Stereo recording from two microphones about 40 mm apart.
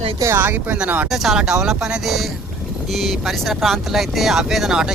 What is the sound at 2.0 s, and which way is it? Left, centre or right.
Speech, centre.